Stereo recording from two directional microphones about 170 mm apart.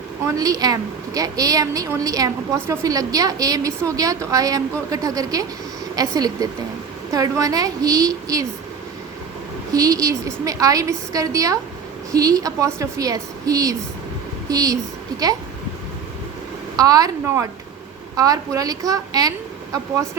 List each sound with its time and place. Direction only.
0.3 s a woman's voice: 20° right (ahead or behind)
9.7 s a woman's voice: 20° right (ahead or behind)
16.7 s a woman's voice: 20° right (ahead or behind)